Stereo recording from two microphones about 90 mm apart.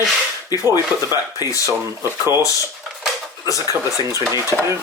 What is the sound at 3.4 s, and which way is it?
Speech, 40° left (ahead or behind).